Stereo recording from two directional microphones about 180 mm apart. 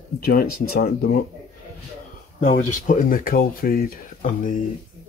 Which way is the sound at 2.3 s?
40° left (ahead or behind).